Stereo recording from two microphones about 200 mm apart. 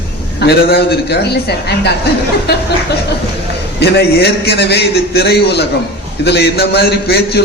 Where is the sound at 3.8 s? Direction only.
55° left (ahead or behind).